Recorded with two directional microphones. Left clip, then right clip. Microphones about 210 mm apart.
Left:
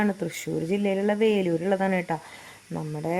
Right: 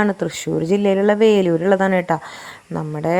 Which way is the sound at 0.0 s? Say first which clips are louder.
Right 8 dB; 20° right (ahead or behind).